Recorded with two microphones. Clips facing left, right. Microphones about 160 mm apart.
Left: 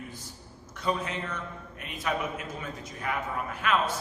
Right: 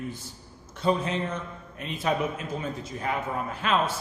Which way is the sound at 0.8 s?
30° right (ahead or behind).